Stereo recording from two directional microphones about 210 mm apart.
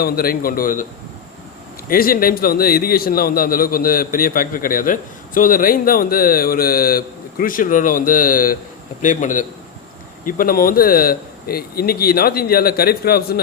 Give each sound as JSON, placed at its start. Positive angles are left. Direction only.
{"t": 0.0, "sound": "a man's voice", "side_deg": 45}
{"t": 1.9, "sound": "a man's voice", "side_deg": 45}